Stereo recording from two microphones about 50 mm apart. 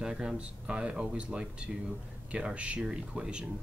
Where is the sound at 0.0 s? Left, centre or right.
Centre.